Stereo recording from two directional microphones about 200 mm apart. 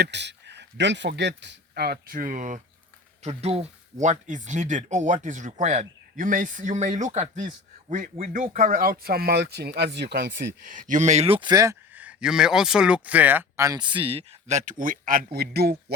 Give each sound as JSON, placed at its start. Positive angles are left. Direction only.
{"t": 0.0, "sound": "speech", "side_deg": -60}
{"t": 10.7, "sound": "a man's voice", "side_deg": -40}